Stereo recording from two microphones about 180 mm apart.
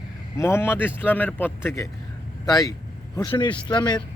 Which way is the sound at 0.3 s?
15° left (ahead or behind).